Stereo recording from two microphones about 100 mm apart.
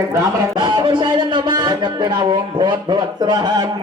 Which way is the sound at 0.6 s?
50° right (ahead or behind).